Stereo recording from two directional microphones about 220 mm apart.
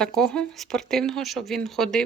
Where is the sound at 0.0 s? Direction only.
5° left (ahead or behind).